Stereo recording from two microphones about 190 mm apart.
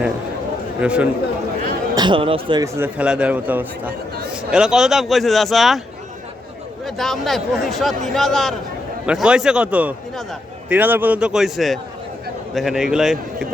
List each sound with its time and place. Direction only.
0.8 s a man's voice: 5° right (ahead or behind)
2.0 s speech: 25° right (ahead or behind)
2.7 s a man's voice: 10° right (ahead or behind)
6.8 s speech: centre (ahead or behind)